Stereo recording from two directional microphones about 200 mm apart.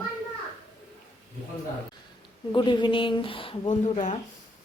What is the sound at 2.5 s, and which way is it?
Speech, 25° left (ahead or behind).